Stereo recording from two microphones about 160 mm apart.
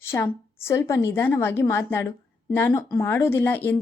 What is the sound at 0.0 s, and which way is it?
A woman's voice, 15° left (ahead or behind).